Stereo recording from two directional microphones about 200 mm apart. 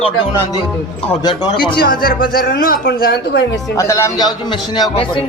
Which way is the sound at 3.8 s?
15° left (ahead or behind).